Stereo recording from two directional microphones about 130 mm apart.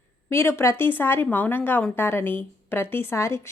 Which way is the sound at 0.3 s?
20° left (ahead or behind).